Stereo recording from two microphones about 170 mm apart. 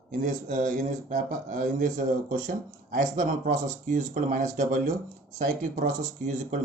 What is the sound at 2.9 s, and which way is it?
Speech, 45° right (ahead or behind).